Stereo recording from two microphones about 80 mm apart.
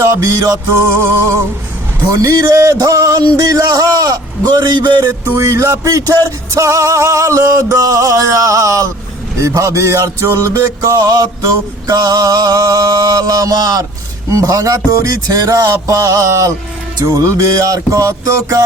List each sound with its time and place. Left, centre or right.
0.0 s music: right
2.1 s speech: right
5.4 s music: right
10.9 s music: right
11.9 s speech: right
15.7 s music: right
17.1 s speech: right